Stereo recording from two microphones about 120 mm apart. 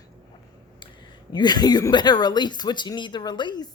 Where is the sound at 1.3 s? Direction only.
35° left (ahead or behind).